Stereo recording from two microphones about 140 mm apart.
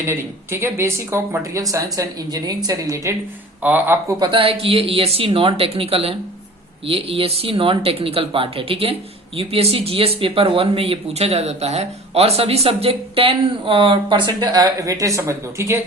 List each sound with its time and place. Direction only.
0.0 s speech: 15° right (ahead or behind)
4.2 s speech: 40° right (ahead or behind); by 15.8 s 20° right (ahead or behind)